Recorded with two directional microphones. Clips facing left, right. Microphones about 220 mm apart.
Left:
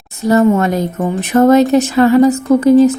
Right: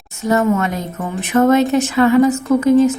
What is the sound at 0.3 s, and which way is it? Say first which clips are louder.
Speech: left 5 dB; 35° left (ahead or behind).